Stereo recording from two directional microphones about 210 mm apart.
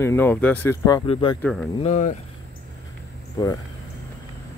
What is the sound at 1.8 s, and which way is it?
Speech, 35° left (ahead or behind).